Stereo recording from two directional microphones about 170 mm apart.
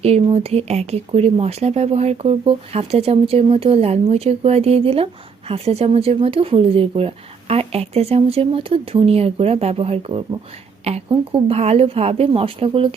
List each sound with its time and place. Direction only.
0.0 s speech: 40° right (ahead or behind)